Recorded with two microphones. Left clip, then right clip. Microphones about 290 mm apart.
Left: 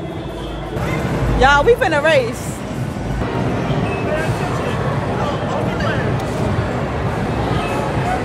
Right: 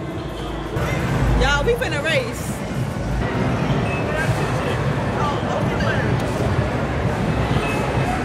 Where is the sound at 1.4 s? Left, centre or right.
Left.